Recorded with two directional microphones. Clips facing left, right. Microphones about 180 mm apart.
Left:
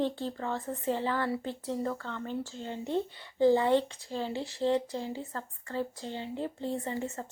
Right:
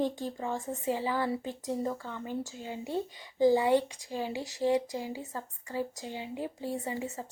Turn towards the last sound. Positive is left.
turn(degrees=-10)  # may be behind; listen again after turning